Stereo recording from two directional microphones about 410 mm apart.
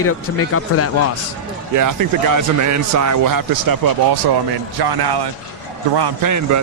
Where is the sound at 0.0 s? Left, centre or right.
Left.